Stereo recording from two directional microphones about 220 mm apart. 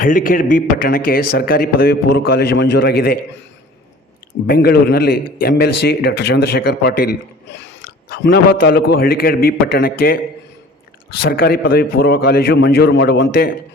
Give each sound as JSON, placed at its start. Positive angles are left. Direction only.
{"t": 0.0, "sound": "a man's voice", "side_deg": 40}
{"t": 4.4, "sound": "a man's voice", "side_deg": 45}
{"t": 11.3, "sound": "a man's voice", "side_deg": 40}